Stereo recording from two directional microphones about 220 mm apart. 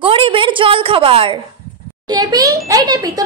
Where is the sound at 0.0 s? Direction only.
25° right (ahead or behind).